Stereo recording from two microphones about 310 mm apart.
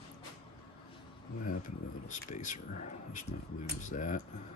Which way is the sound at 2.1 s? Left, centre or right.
Left.